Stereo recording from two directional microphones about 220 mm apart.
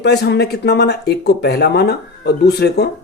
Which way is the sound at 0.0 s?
50° left (ahead or behind).